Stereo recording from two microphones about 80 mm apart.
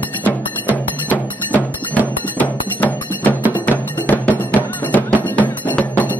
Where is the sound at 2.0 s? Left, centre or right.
Left.